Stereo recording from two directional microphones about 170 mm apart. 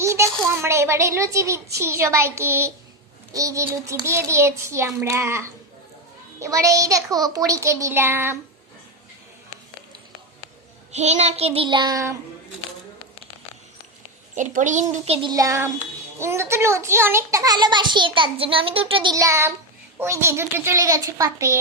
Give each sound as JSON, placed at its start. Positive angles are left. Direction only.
{"t": 0.0, "sound": "a child's voice", "side_deg": -15}
{"t": 1.8, "sound": "child singing", "side_deg": -15}
{"t": 6.4, "sound": "a child's voice", "side_deg": -20}
{"t": 10.9, "sound": "child singing", "side_deg": -40}
{"t": 14.3, "sound": "a child's voice", "side_deg": -45}
{"t": 14.9, "sound": "child singing", "side_deg": -35}
{"t": 15.3, "sound": "a child's voice", "side_deg": -20}
{"t": 19.1, "sound": "child singing", "side_deg": -20}